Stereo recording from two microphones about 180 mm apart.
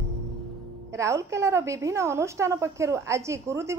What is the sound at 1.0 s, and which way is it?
Speech, 15° right (ahead or behind).